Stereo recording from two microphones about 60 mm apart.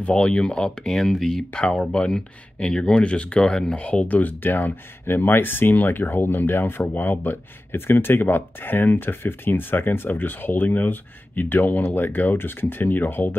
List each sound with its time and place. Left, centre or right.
0.0 s speech: centre
1.5 s speech: centre; by 13.3 s left